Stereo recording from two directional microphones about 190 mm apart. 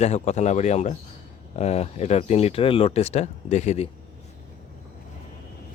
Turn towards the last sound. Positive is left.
turn(degrees=35)  # may be behind; listen again after turning